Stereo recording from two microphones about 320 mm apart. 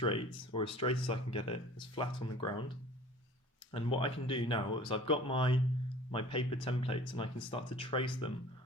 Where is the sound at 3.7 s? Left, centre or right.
Centre.